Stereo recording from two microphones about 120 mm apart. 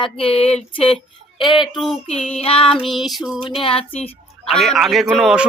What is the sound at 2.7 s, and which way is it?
Speech, centre (ahead or behind).